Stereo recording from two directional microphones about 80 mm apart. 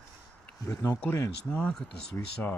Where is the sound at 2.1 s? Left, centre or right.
Left.